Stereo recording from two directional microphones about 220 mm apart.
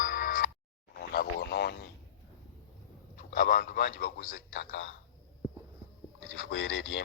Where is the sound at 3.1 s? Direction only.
40° left (ahead or behind).